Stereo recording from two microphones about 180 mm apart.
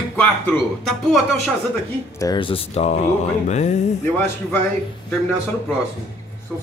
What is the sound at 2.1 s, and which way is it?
Speech, 25° left (ahead or behind).